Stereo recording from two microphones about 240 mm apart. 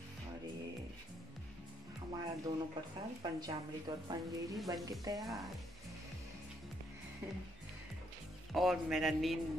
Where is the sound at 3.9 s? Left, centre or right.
Centre.